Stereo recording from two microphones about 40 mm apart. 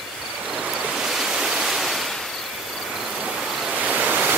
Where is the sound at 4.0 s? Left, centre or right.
Right.